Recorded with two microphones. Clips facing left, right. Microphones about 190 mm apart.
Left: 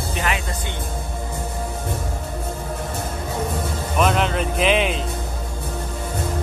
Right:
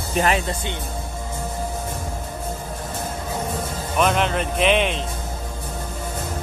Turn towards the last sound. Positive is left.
turn(degrees=0)  # may be behind; listen again after turning